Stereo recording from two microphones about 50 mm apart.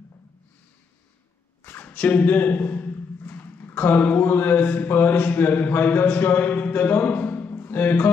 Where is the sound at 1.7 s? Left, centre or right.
Left.